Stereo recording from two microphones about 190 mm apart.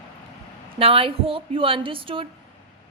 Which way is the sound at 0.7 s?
30° right (ahead or behind).